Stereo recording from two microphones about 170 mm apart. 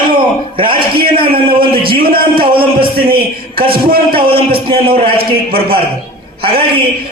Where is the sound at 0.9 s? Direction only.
30° right (ahead or behind).